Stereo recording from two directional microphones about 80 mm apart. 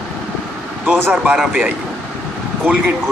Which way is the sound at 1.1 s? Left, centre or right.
Centre.